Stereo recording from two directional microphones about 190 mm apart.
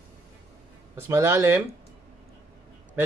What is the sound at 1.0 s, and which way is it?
Speech, 15° right (ahead or behind).